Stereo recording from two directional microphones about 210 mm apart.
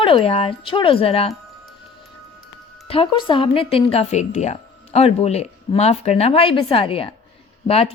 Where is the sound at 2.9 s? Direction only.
25° left (ahead or behind).